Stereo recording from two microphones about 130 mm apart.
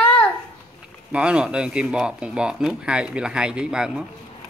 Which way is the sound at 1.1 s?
10° right (ahead or behind).